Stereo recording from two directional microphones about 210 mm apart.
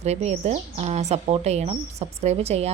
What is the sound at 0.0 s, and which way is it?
Speech, 30° right (ahead or behind).